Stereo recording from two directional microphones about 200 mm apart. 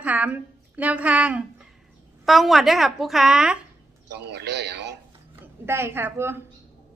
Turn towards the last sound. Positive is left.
turn(degrees=-10)  # may be behind; listen again after turning